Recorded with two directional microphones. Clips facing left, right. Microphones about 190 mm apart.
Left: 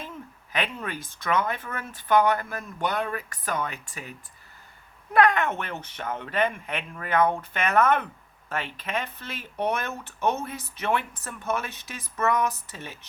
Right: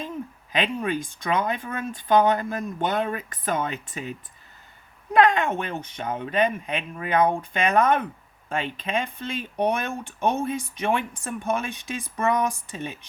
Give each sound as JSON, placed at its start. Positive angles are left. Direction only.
{"t": 0.5, "sound": "speech", "side_deg": -20}
{"t": 5.1, "sound": "speech", "side_deg": -20}